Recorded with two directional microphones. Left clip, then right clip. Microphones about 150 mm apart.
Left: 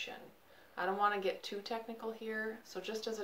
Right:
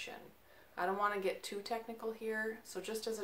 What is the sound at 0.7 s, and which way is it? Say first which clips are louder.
A woman's voice: left 2 dB; 15° right (ahead or behind).